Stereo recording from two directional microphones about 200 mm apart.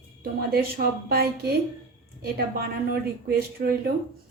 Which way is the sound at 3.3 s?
50° right (ahead or behind).